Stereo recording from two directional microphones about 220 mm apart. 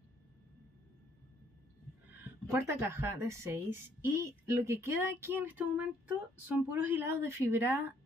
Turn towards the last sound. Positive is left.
turn(degrees=-10)  # may be behind; listen again after turning